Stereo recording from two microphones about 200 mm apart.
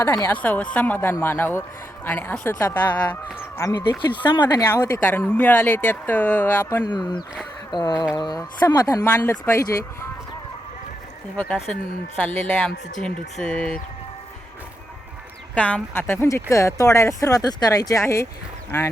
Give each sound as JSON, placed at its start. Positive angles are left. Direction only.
{"t": 0.0, "sound": "a woman's voice", "side_deg": 15}
{"t": 11.3, "sound": "a woman's voice", "side_deg": 0}
{"t": 15.5, "sound": "a woman's voice", "side_deg": 5}